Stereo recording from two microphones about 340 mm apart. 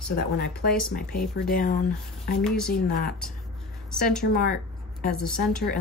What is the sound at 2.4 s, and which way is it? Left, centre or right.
Speech, centre.